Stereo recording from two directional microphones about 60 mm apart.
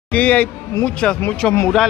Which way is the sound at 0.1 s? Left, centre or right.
Left.